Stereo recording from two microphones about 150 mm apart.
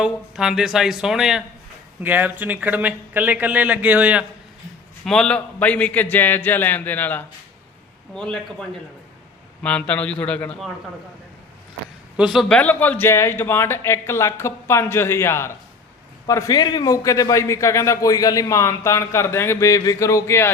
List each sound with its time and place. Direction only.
0.0 s speech: 5° right (ahead or behind)
5.0 s speech: 5° left (ahead or behind)
12.1 s speech: 5° right (ahead or behind)
12.5 s a man's voice: 10° left (ahead or behind)